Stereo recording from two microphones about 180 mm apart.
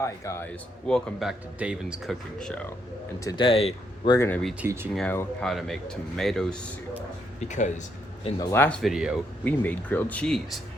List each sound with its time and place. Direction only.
0.0 s speech: 15° left (ahead or behind)
0.9 s speech: 5° left (ahead or behind)
3.2 s speech: 25° left (ahead or behind)
4.6 s speech: 10° right (ahead or behind)
4.9 s speech: 5° left (ahead or behind)
7.4 s speech: 40° left (ahead or behind)
8.4 s speech: 15° left (ahead or behind)
8.8 s speech: 5° right (ahead or behind)
9.4 s speech: 10° left (ahead or behind)